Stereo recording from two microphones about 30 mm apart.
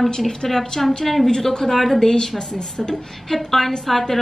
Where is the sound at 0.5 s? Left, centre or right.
Centre.